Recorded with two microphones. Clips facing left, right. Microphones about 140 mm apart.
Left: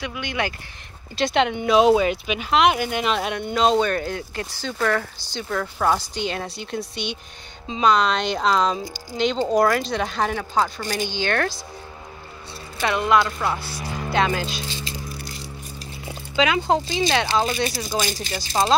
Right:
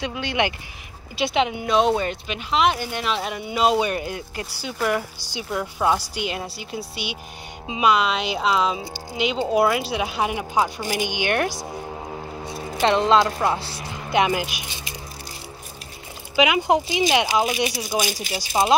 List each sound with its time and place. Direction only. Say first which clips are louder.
0.0 s speech: right 3 dB; 30° right (ahead or behind)
1.1 s speech: left 1 dB; 5° right (ahead or behind)
12.8 s speech: right 2 dB; 25° right (ahead or behind)
13.8 s speech: right 1 dB; 15° right (ahead or behind)
16.3 s speech: right 1 dB; 15° right (ahead or behind)